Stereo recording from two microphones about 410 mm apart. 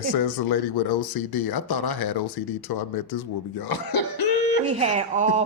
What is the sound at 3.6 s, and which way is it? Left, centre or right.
Cough, left.